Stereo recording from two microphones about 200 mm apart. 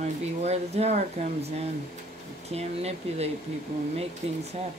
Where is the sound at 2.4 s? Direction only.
30° right (ahead or behind).